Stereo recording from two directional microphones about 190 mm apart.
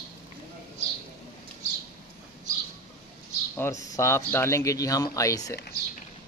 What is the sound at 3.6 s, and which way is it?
Speech, 15° left (ahead or behind).